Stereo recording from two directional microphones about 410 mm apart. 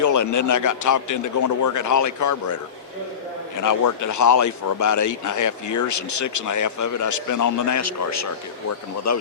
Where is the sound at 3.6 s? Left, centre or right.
Left.